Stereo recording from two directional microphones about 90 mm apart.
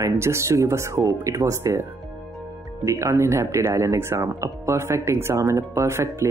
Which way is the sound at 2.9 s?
35° right (ahead or behind).